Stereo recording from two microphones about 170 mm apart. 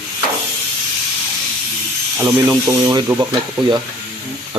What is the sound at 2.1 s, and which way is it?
Speech, 10° right (ahead or behind).